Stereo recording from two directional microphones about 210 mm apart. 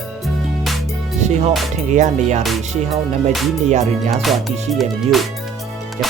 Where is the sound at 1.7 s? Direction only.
35° right (ahead or behind).